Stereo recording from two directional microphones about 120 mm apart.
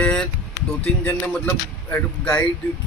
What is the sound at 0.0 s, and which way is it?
Speech, 5° left (ahead or behind).